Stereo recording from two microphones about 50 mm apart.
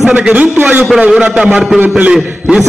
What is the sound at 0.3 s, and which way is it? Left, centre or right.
A man's voice, right.